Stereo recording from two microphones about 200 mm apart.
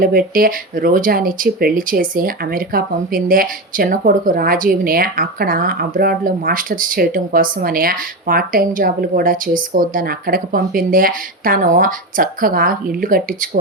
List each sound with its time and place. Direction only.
0.0 s speech: 45° right (ahead or behind)